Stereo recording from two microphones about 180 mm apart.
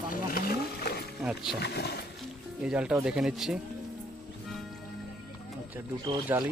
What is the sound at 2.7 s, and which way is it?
Speech, 5° right (ahead or behind).